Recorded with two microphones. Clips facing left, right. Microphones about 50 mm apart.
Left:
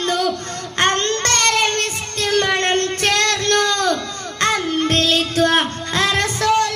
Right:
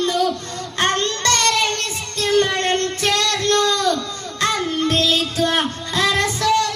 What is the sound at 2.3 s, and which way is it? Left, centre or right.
Child singing, left.